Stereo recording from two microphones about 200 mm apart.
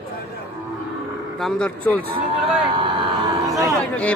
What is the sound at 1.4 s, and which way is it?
Speech, 5° left (ahead or behind).